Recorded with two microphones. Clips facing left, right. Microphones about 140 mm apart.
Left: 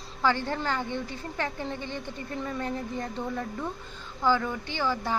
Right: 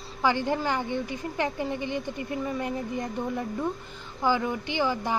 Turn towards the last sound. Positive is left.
turn(degrees=-15)  # may be behind; listen again after turning